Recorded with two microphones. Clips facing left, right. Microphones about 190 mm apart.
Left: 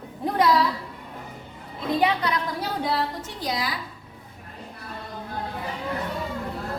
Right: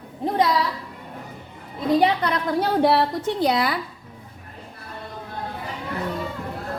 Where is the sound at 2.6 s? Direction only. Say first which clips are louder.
Right 10 dB; 70° right (ahead or behind).